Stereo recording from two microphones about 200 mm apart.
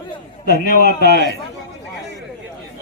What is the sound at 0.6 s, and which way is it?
Speech, 55° right (ahead or behind).